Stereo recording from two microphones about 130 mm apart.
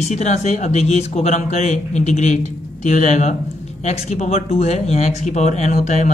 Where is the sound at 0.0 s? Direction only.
60° left (ahead or behind).